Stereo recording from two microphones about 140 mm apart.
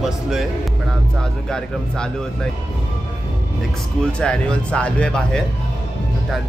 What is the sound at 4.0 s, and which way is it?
Speech, 5° left (ahead or behind).